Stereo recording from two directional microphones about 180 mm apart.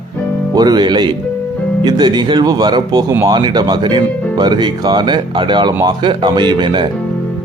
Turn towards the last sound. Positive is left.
turn(degrees=-25)  # may be behind; listen again after turning